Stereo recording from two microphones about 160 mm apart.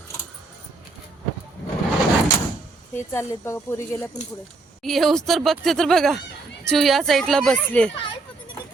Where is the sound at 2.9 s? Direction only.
15° left (ahead or behind).